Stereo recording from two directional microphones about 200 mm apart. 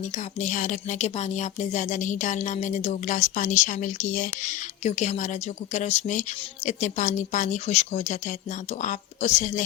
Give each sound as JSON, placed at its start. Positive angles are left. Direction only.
{"t": 0.4, "sound": "speech", "side_deg": 40}